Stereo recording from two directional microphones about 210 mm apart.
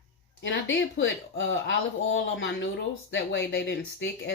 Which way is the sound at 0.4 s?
65° left (ahead or behind).